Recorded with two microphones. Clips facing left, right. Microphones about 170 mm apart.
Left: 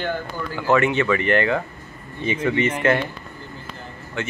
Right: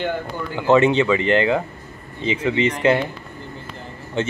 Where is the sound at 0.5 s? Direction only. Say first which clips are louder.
Right 4 dB; 20° right (ahead or behind).